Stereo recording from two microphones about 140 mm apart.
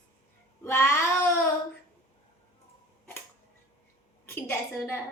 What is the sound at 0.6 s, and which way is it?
Child singing, 20° left (ahead or behind).